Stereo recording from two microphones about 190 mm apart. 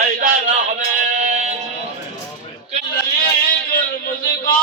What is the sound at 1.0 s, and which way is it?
Sheep, 40° right (ahead or behind).